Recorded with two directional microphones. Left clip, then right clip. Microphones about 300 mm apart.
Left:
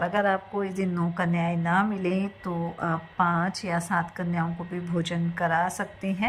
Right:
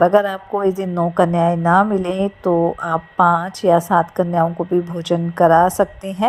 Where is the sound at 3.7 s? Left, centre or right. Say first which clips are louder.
Right 19 dB; right.